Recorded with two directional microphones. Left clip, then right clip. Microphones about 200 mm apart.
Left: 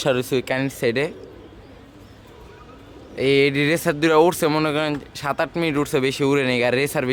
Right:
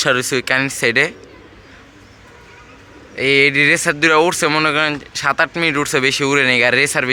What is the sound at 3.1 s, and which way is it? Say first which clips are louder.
A man's voice: right 5 dB; 15° left (ahead or behind).